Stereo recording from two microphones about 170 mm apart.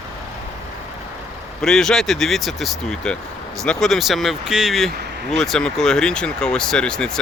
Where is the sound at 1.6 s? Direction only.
5° left (ahead or behind).